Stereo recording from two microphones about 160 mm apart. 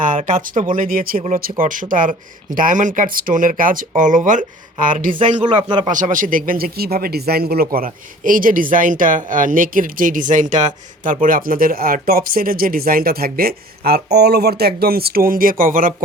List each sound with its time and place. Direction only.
0.2 s speech: 50° right (ahead or behind)
5.4 s speech: 30° right (ahead or behind)
5.9 s speech: 55° right (ahead or behind)